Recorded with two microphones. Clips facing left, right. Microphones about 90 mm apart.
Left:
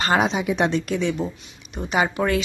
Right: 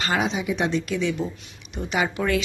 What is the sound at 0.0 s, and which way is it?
Speech, 45° left (ahead or behind).